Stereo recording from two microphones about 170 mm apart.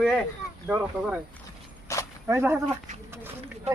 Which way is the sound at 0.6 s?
10° right (ahead or behind).